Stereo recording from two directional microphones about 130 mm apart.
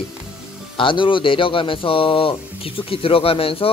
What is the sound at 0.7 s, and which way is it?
A man's voice, 40° left (ahead or behind).